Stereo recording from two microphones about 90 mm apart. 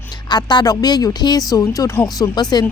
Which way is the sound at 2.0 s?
45° left (ahead or behind).